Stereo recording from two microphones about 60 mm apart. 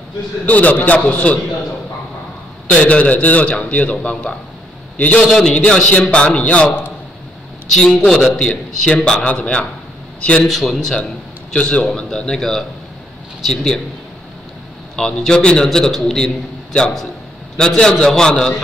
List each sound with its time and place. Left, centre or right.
0.5 s a man's voice: left
2.7 s a man's voice: left
7.7 s a man's voice: centre
10.4 s speech: centre
11.5 s a man's voice: centre
15.0 s a man's voice: centre